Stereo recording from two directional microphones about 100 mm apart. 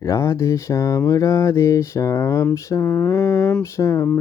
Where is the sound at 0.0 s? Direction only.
30° left (ahead or behind).